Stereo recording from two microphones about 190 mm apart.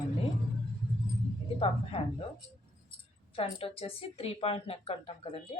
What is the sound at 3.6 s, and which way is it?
Speech, 30° left (ahead or behind).